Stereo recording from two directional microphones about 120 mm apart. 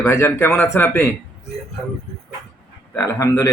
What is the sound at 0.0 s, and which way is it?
Speech, 25° left (ahead or behind).